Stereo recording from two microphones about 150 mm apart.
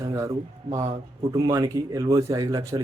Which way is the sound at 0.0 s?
20° right (ahead or behind).